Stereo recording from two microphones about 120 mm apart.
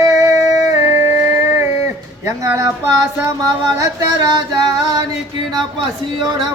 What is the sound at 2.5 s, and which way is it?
Music, 25° right (ahead or behind).